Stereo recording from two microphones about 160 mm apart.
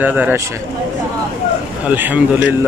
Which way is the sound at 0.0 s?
10° right (ahead or behind).